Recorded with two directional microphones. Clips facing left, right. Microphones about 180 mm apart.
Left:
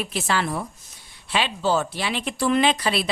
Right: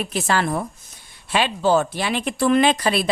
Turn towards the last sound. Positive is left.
turn(degrees=-50)  # may be behind; listen again after turning